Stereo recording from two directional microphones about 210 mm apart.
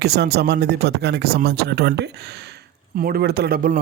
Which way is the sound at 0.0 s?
50° right (ahead or behind).